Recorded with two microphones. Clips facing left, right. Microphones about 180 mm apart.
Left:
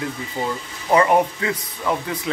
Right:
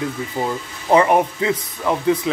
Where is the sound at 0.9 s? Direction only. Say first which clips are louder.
Right 2 dB; 20° right (ahead or behind).